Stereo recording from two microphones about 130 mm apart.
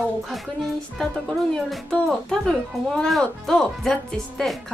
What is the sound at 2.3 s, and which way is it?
A woman's voice, 5° left (ahead or behind).